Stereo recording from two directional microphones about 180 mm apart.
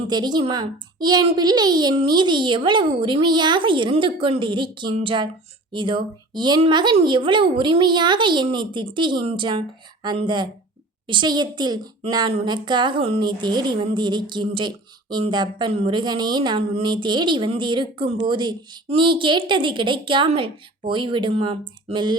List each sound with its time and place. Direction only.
0.1 s a child's voice: 25° right (ahead or behind)